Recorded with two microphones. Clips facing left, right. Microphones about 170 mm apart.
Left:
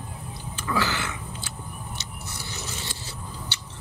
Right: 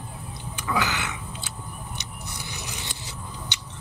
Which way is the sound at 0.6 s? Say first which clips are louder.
Even; 15° right (ahead or behind).